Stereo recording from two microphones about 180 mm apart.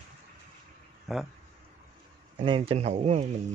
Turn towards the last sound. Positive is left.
turn(degrees=-35)  # may be behind; listen again after turning